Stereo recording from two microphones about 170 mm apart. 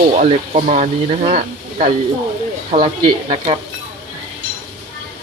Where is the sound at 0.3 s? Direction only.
45° right (ahead or behind).